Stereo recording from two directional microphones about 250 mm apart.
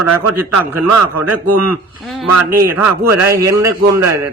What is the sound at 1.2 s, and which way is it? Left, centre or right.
Speech, right.